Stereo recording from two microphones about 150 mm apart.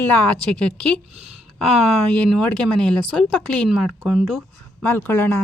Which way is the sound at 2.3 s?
5° left (ahead or behind).